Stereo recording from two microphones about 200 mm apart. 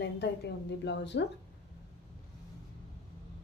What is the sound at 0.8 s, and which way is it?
Speech, 60° left (ahead or behind).